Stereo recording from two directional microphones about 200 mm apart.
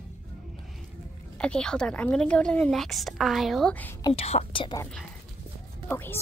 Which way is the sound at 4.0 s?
30° left (ahead or behind).